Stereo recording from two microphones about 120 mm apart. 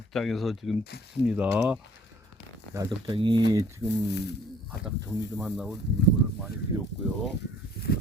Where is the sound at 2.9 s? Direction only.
40° right (ahead or behind).